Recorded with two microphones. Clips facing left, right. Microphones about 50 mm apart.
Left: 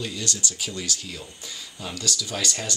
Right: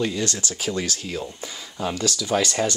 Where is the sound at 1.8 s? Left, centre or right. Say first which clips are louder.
Right 6 dB; right.